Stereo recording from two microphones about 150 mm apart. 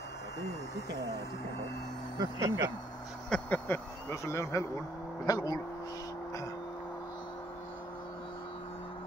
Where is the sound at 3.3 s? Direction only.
10° left (ahead or behind).